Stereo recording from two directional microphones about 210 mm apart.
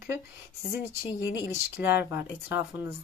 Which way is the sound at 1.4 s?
15° right (ahead or behind).